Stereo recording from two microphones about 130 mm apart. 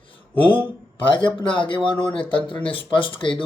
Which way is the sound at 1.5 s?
40° left (ahead or behind).